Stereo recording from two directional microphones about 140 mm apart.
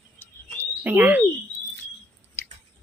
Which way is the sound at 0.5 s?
15° right (ahead or behind).